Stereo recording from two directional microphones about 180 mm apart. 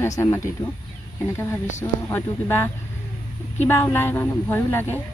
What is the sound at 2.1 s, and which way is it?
Speech, 15° left (ahead or behind).